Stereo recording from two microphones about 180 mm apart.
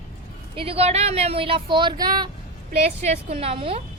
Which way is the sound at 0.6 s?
35° right (ahead or behind).